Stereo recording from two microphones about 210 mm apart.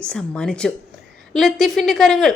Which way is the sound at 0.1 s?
5° left (ahead or behind).